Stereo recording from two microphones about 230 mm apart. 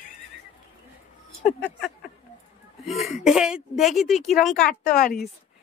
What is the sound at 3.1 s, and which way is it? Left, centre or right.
Speech, centre.